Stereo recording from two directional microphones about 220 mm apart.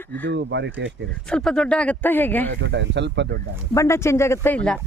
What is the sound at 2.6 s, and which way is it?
Speech, 55° right (ahead or behind).